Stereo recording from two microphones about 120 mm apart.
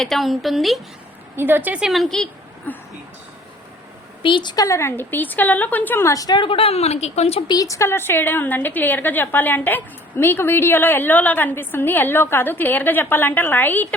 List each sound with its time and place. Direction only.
0.0 s a woman's voice: centre (ahead or behind)
1.4 s speech: 15° right (ahead or behind)
1.9 s a woman's voice: centre (ahead or behind)
4.2 s a woman's voice: 40° left (ahead or behind); by 7.4 s 60° left (ahead or behind)
7.4 s a woman's voice: 30° left (ahead or behind)